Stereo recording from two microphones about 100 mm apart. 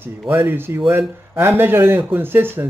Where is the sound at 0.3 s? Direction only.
25° right (ahead or behind).